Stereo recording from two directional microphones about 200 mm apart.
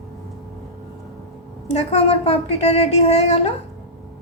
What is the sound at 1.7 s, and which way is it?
A woman's voice, 30° left (ahead or behind).